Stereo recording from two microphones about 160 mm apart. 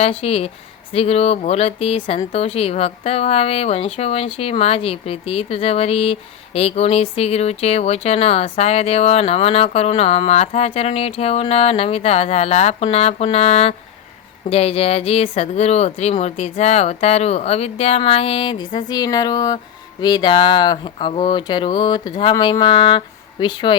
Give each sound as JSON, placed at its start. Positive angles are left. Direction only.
{"t": 0.0, "sound": "speech", "side_deg": 40}